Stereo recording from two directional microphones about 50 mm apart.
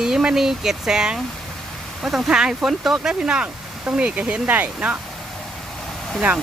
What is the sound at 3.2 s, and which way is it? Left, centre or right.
Speech, centre.